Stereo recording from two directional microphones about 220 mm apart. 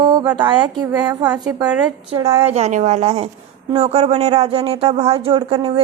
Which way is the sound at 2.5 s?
30° right (ahead or behind).